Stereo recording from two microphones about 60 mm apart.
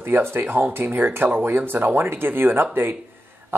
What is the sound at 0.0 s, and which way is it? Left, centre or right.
Speech, right.